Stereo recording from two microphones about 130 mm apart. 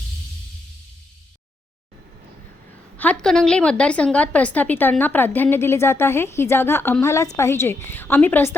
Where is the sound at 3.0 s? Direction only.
10° left (ahead or behind).